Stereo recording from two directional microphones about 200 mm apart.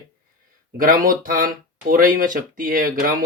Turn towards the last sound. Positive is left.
turn(degrees=-45)  # may be behind; listen again after turning